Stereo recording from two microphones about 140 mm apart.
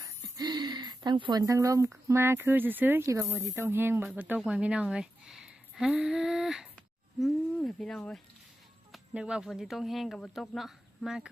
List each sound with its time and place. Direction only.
0.2 s speech: 30° right (ahead or behind); by 8.2 s 5° left (ahead or behind)
8.9 s speech: 5° right (ahead or behind)